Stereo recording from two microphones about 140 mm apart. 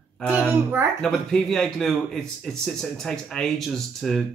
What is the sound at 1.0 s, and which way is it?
Speech, 5° left (ahead or behind).